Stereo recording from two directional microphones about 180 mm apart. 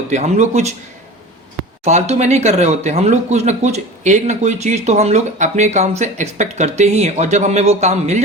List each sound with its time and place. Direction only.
0.1 s speech: 40° right (ahead or behind)
1.8 s speech: 40° right (ahead or behind)